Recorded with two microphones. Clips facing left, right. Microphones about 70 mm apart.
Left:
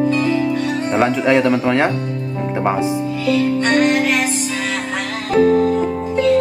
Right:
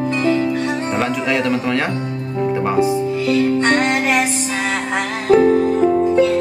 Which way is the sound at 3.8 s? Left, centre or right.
Right.